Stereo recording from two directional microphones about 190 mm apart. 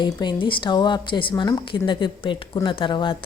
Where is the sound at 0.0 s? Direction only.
25° left (ahead or behind).